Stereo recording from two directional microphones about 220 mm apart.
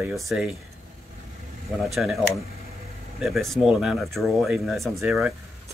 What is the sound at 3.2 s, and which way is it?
Speech, centre (ahead or behind).